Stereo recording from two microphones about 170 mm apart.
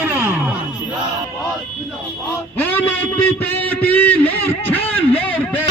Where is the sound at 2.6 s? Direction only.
10° left (ahead or behind).